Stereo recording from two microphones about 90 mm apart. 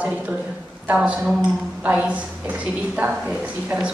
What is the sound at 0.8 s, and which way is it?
A woman's voice, 15° right (ahead or behind).